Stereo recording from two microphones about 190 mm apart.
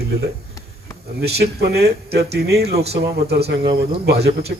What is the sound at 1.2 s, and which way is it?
Speech, 60° right (ahead or behind).